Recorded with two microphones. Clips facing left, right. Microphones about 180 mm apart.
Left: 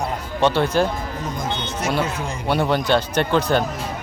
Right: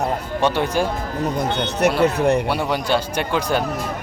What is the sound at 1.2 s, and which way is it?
Speech, 65° right (ahead or behind).